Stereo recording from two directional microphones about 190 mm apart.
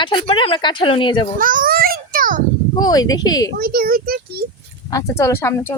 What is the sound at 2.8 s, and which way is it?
Speech, 20° left (ahead or behind).